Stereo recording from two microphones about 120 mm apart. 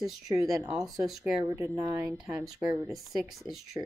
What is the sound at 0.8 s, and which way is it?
Speech, 30° right (ahead or behind).